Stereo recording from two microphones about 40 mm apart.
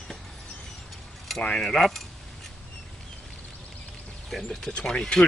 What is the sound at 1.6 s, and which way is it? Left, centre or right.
Speech, centre.